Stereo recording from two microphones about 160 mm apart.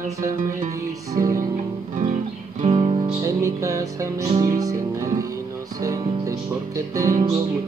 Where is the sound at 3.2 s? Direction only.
20° right (ahead or behind).